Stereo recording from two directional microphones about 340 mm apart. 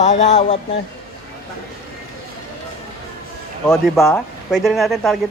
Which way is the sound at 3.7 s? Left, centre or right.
Centre.